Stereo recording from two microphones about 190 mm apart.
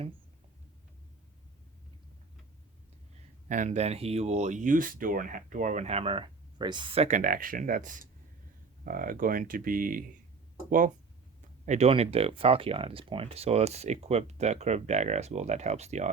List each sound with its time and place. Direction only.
3.5 s speech: 40° right (ahead or behind)